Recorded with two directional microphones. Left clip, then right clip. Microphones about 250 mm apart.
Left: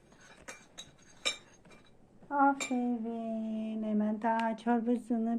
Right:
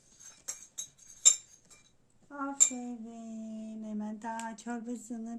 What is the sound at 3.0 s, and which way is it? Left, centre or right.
Speech, centre.